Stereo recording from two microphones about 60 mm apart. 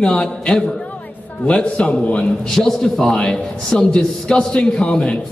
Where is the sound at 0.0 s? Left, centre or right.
Centre.